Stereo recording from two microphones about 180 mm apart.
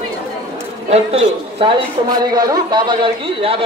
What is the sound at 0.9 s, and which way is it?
A man's voice, 35° right (ahead or behind).